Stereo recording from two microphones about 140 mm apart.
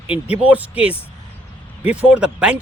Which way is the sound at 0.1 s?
10° right (ahead or behind).